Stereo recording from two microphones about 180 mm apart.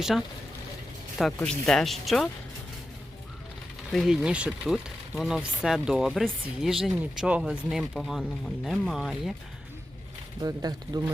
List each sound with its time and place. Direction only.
0.0 s speech: centre (ahead or behind)
3.9 s speech: centre (ahead or behind)
10.4 s speech: 20° right (ahead or behind)